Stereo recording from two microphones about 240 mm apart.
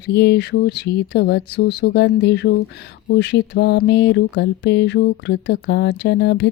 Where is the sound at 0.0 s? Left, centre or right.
Left.